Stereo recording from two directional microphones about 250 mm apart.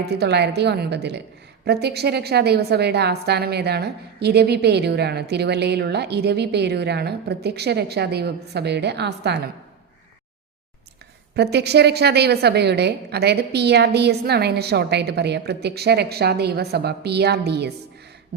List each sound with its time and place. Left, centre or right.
0.0 s a woman's voice: right
11.5 s a woman's voice: right